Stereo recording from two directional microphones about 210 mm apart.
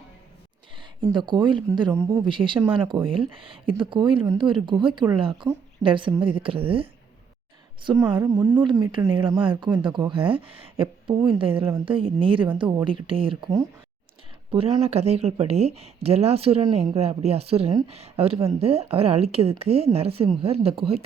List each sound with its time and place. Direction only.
1.1 s speech: 20° right (ahead or behind)
7.9 s speech: 20° right (ahead or behind)